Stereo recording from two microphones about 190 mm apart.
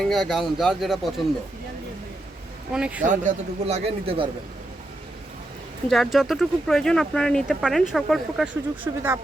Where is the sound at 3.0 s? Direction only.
40° right (ahead or behind).